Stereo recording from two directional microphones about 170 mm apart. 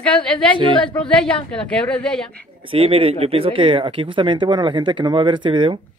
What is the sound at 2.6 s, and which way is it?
Speech, 35° right (ahead or behind).